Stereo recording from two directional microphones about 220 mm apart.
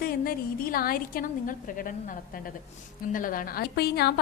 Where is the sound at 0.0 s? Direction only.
40° left (ahead or behind).